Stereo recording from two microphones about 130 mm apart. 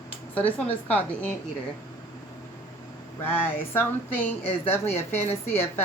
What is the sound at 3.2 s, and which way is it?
A woman's voice, 15° left (ahead or behind).